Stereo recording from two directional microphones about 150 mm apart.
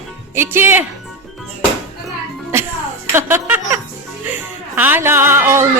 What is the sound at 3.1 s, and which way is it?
Music, 20° right (ahead or behind).